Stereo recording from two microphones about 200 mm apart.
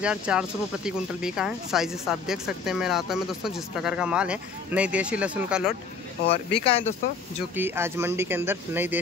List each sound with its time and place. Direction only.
0.0 s speech: 5° right (ahead or behind)
6.6 s speech: 30° left (ahead or behind)
7.5 s speech: 10° right (ahead or behind)